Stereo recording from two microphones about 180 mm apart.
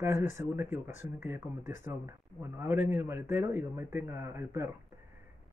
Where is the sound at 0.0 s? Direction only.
10° right (ahead or behind).